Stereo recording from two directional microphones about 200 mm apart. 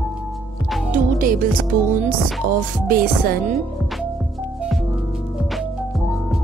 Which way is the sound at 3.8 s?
Centre (ahead or behind).